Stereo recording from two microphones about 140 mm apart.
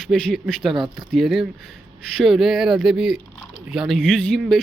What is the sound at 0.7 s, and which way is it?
Speech, 35° right (ahead or behind).